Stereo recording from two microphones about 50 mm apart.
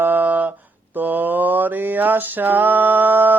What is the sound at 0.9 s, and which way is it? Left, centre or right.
Mantra, right.